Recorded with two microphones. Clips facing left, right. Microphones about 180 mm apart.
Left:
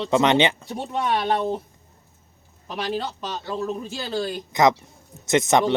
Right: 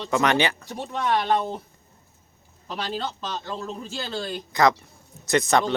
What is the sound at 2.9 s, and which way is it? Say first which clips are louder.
A man's voice: left 2 dB; 15° left (ahead or behind).